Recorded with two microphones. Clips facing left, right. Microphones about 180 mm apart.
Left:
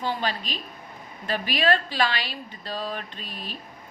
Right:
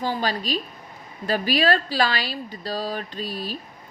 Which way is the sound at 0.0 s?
40° right (ahead or behind).